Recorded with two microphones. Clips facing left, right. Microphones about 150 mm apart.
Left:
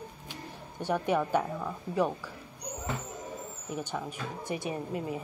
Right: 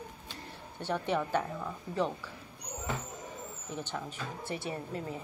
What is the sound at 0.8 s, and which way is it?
Speech, 10° left (ahead or behind).